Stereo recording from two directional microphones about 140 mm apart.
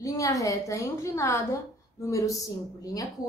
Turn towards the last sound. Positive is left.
turn(degrees=25)  # may be behind; listen again after turning